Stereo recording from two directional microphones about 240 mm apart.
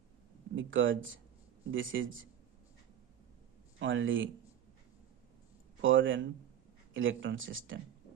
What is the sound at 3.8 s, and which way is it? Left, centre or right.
Speech, right.